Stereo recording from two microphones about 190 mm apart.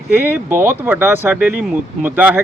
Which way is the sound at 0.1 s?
10° right (ahead or behind).